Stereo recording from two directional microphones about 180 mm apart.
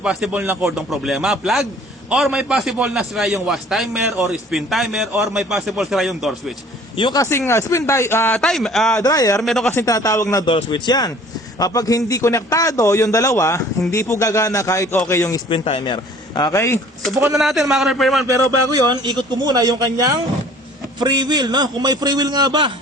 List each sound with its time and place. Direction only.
0.0 s a man's voice: 5° right (ahead or behind)
6.9 s a man's voice: 25° left (ahead or behind); by 9.0 s centre (ahead or behind)
9.0 s a man's voice: 20° left (ahead or behind)
9.4 s a man's voice: centre (ahead or behind)
9.7 s a man's voice: 20° left (ahead or behind)
17.3 s a man's voice: centre (ahead or behind)
18.3 s a man's voice: 20° right (ahead or behind)